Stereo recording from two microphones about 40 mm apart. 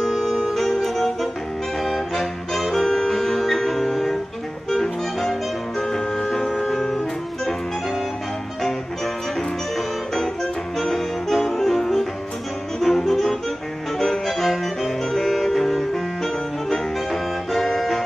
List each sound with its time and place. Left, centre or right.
0.0 s music: centre
0.5 s saxophone: centre
1.8 s music: centre
9.8 s music: centre